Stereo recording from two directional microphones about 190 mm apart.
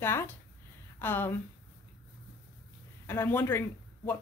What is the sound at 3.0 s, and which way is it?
Speech, 10° left (ahead or behind).